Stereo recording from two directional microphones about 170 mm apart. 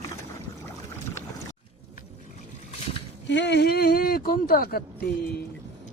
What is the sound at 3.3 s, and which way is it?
Speech, 90° left.